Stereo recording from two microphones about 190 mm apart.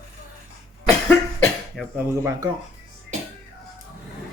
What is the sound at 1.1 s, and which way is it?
Cough, 10° left (ahead or behind).